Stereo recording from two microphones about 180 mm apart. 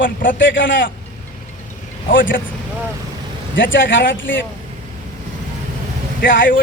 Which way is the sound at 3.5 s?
90° left.